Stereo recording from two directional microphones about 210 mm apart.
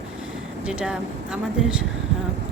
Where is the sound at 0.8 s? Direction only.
5° right (ahead or behind).